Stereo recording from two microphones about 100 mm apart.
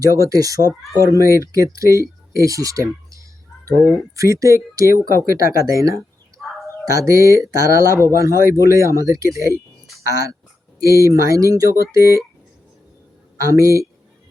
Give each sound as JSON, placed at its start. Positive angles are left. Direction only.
{"t": 0.0, "sound": "speech", "side_deg": -35}
{"t": 13.4, "sound": "speech", "side_deg": -30}